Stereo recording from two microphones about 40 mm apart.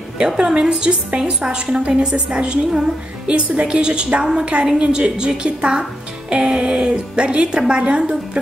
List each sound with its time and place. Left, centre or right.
0.4 s speech: right